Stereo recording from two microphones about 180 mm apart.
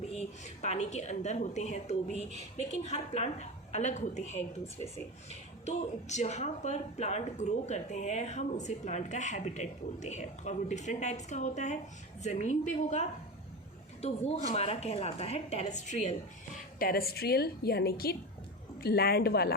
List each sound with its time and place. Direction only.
0.0 s a woman's voice: 35° left (ahead or behind)
16.7 s a woman's voice: 55° left (ahead or behind)